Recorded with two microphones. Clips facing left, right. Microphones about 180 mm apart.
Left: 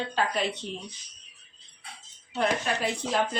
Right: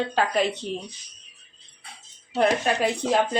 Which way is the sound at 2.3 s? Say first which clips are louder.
Right 5 dB; 60° right (ahead or behind).